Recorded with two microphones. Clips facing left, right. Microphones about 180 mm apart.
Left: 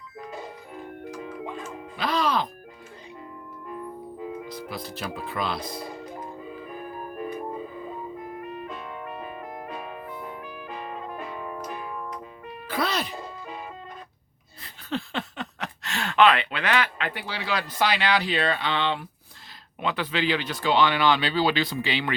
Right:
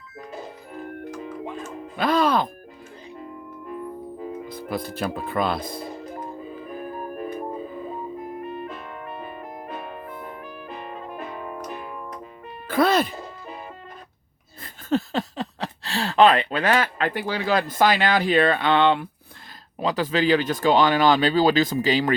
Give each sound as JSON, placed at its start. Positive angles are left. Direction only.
{"t": 2.0, "sound": "speech", "side_deg": -50}
{"t": 4.3, "sound": "speech", "side_deg": -55}
{"t": 12.6, "sound": "music", "side_deg": -50}
{"t": 14.6, "sound": "a sound", "side_deg": -45}
{"t": 19.8, "sound": "speech", "side_deg": -40}